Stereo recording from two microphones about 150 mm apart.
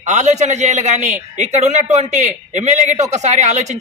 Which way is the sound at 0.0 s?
50° right (ahead or behind).